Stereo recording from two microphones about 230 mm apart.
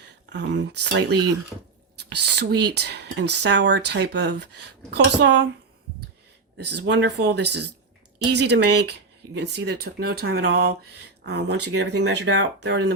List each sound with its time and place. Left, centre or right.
0.3 s speech: right
6.7 s speech: right